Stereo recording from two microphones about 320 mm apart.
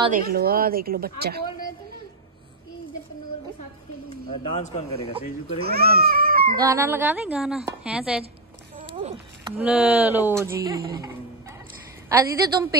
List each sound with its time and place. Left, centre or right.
0.0 s a woman's voice: right
4.1 s speech: centre
5.6 s speech: right
6.7 s a woman's voice: centre
8.7 s a sound: centre
9.6 s speech: centre
12.1 s speech: centre